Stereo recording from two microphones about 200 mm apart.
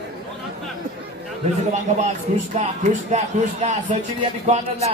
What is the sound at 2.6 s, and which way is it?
Speech, 35° right (ahead or behind).